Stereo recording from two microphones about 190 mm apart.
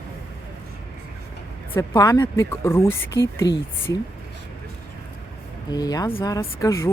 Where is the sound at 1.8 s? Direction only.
20° left (ahead or behind).